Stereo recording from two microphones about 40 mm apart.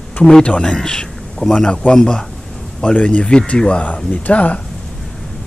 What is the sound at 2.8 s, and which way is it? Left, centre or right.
Speech, left.